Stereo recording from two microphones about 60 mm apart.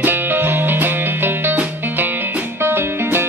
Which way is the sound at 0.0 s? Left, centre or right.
Right.